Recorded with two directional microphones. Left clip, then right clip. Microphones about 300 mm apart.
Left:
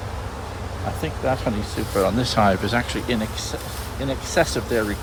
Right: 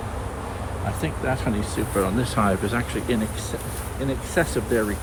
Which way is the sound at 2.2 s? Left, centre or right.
Left.